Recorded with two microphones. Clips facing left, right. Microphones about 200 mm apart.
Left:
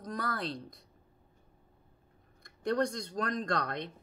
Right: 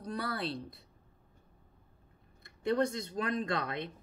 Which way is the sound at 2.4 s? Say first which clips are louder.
Even; 5° right (ahead or behind).